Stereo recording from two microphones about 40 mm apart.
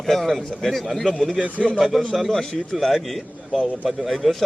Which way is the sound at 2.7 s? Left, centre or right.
Centre.